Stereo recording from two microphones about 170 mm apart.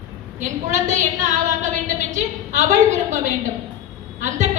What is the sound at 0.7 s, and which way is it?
A woman's voice, 45° right (ahead or behind).